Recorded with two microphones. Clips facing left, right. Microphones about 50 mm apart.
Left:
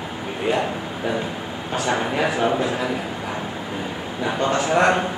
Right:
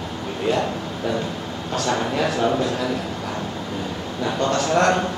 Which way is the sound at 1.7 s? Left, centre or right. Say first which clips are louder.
Even; centre.